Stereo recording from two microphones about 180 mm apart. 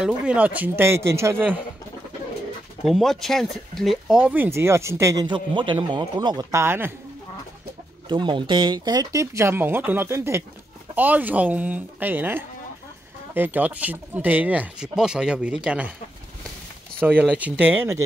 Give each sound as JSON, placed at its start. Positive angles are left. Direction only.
{"t": 0.0, "sound": "speech", "side_deg": -5}
{"t": 2.8, "sound": "speech", "side_deg": 0}
{"t": 8.1, "sound": "speech", "side_deg": -25}
{"t": 17.0, "sound": "speech", "side_deg": -10}